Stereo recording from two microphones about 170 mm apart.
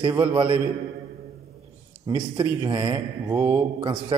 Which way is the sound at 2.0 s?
30° right (ahead or behind).